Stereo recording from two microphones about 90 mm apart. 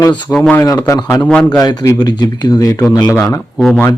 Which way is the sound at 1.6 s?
45° left (ahead or behind).